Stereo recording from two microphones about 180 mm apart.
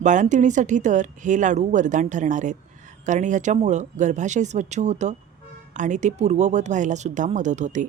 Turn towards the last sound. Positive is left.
turn(degrees=-40)  # may be behind; listen again after turning